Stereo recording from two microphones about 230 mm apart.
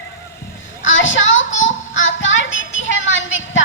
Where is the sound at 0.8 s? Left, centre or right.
Left.